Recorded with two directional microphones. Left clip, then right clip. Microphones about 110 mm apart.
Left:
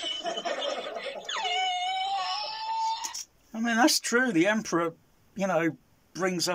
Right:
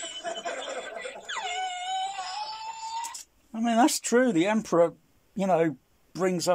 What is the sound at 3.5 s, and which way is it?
Speech, 30° right (ahead or behind).